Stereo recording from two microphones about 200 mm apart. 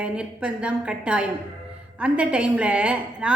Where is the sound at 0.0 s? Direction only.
5° right (ahead or behind).